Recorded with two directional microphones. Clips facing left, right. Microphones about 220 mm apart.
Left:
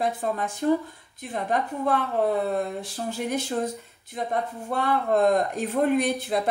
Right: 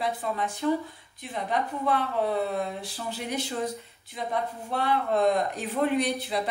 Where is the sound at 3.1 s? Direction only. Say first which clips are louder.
Left 4 dB; 45° left (ahead or behind).